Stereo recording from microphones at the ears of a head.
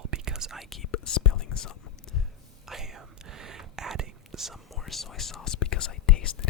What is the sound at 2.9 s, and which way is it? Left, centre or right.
Whispering, right.